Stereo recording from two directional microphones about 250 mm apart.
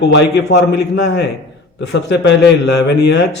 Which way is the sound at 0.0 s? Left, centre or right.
Left.